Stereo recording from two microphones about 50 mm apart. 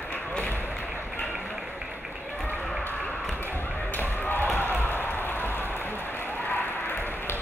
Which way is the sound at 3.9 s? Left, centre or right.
Left.